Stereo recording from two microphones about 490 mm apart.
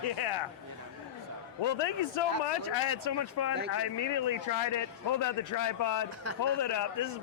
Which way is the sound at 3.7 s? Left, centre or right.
Left.